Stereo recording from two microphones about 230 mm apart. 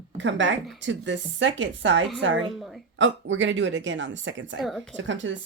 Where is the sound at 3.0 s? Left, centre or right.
Right.